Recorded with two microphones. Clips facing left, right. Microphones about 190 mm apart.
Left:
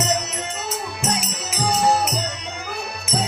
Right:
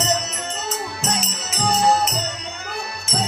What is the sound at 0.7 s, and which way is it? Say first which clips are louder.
Music: left 1 dB; 10° left (ahead or behind).